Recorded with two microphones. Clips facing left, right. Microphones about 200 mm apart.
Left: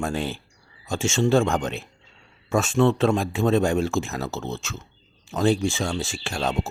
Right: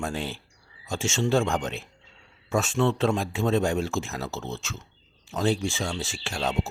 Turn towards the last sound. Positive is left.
turn(degrees=50)  # may be behind; listen again after turning